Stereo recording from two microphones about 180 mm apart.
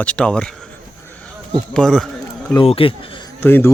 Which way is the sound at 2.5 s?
30° left (ahead or behind).